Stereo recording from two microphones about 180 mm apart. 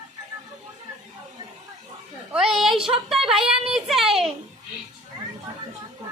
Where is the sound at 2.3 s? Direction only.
5° right (ahead or behind).